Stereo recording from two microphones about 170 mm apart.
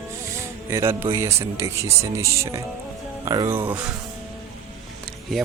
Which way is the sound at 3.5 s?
15° right (ahead or behind).